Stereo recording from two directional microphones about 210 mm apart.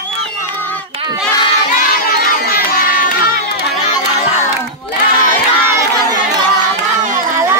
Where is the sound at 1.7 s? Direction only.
45° left (ahead or behind).